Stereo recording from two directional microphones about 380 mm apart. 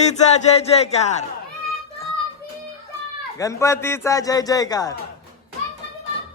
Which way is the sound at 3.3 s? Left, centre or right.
Centre.